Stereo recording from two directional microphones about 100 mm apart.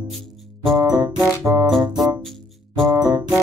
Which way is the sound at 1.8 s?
40° right (ahead or behind).